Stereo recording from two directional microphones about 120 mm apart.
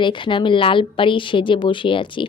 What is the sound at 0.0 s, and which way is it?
Speech, 45° left (ahead or behind).